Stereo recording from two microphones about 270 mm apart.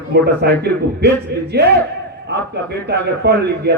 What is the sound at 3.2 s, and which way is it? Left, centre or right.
Speech, right.